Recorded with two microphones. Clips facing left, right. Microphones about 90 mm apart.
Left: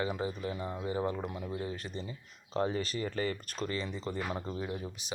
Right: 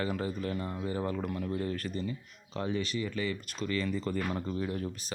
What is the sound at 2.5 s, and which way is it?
Speech, 35° left (ahead or behind).